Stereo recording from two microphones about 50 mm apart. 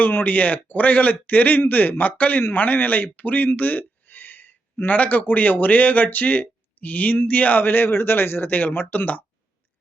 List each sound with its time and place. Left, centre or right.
0.0 s speech: left